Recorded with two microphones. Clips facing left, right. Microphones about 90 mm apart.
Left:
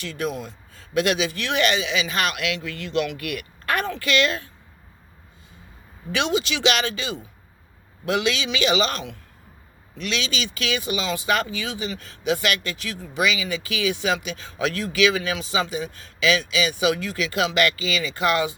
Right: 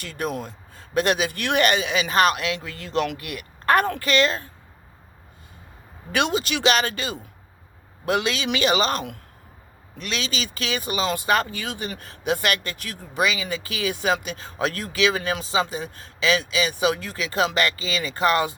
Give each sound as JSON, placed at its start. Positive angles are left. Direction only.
{"t": 0.0, "sound": "a man's voice", "side_deg": -45}
{"t": 3.7, "sound": "speech", "side_deg": -45}
{"t": 4.1, "sound": "speech", "side_deg": -35}
{"t": 6.1, "sound": "a man's voice", "side_deg": -50}